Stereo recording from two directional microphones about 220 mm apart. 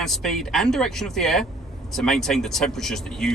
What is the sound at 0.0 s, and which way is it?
Speech, centre (ahead or behind).